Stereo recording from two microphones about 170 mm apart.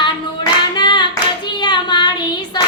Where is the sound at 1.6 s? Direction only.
25° left (ahead or behind).